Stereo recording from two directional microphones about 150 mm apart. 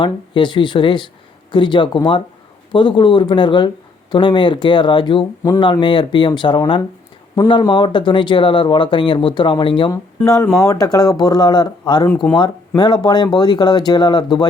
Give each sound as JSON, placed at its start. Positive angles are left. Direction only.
{"t": 0.0, "sound": "speech", "side_deg": 30}
{"t": 9.9, "sound": "speech", "side_deg": 20}
{"t": 12.0, "sound": "speech", "side_deg": 5}
{"t": 12.4, "sound": "speech", "side_deg": 30}